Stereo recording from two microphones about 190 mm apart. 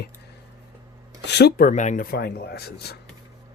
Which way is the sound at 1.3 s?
60° left (ahead or behind).